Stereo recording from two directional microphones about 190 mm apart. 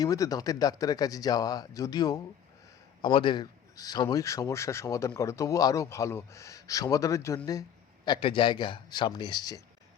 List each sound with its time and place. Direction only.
0.0 s a man's voice: 20° left (ahead or behind)